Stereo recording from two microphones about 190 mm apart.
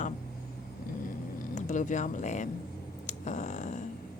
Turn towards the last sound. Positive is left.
turn(degrees=40)  # may be behind; listen again after turning